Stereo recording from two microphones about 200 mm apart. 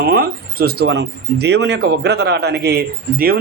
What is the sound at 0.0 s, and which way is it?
Speech, 50° right (ahead or behind).